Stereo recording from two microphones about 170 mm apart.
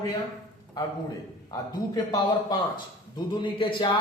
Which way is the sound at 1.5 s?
20° left (ahead or behind).